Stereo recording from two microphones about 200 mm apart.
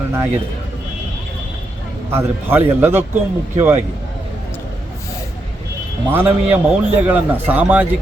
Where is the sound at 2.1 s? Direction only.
10° right (ahead or behind).